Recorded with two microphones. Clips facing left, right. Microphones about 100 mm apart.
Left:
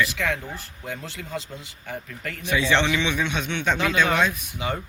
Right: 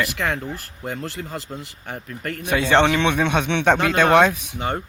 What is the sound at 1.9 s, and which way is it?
A man's voice, 50° right (ahead or behind).